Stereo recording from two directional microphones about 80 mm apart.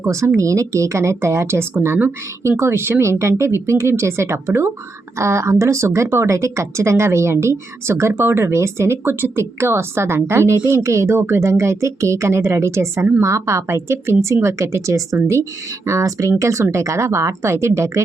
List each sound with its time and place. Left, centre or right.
0.0 s speech: right